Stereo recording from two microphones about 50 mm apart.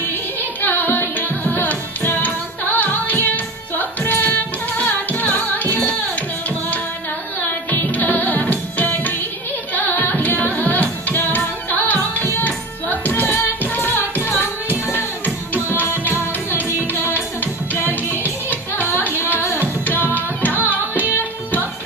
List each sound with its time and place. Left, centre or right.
0.4 s music: left
7.4 s music: left
19.9 s music: left